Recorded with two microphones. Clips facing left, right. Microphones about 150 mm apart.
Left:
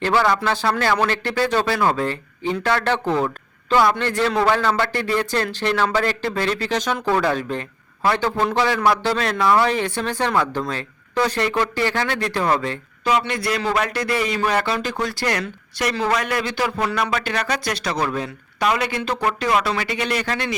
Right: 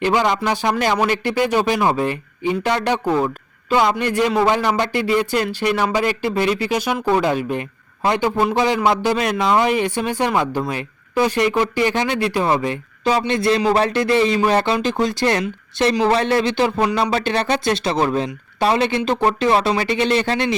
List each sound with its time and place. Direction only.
0.0 s a man's voice: 15° right (ahead or behind)